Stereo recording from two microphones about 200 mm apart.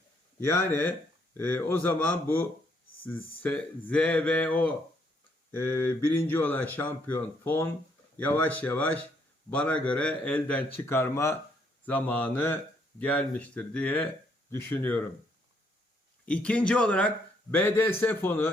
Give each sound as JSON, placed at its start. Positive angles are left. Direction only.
{"t": 0.3, "sound": "speech", "side_deg": 10}
{"t": 16.2, "sound": "speech", "side_deg": 5}